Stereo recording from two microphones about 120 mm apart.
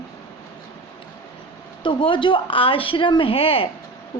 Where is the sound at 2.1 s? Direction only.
45° left (ahead or behind).